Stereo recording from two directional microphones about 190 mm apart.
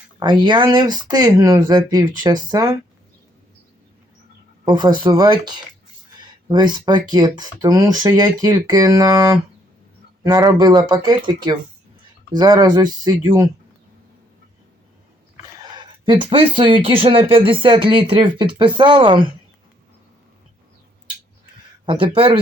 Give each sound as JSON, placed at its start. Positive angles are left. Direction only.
{"t": 0.2, "sound": "speech", "side_deg": -25}
{"t": 4.6, "sound": "speech", "side_deg": -20}
{"t": 15.6, "sound": "speech", "side_deg": -20}
{"t": 21.8, "sound": "speech", "side_deg": -25}